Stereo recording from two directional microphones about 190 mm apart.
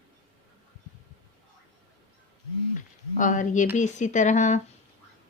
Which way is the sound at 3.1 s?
40° left (ahead or behind).